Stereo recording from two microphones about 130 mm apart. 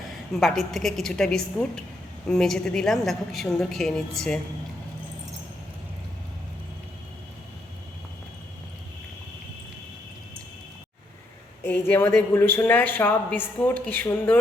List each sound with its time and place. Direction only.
0.3 s a woman's voice: centre (ahead or behind)
11.6 s speech: 15° left (ahead or behind)